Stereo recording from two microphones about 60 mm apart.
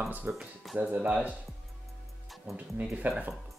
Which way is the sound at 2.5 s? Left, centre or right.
Right.